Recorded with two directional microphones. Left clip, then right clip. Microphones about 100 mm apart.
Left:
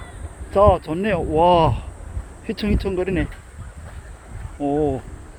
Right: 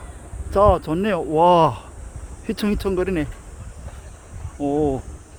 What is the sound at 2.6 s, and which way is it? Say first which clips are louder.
Speech: right 1 dB; 70° right (ahead or behind).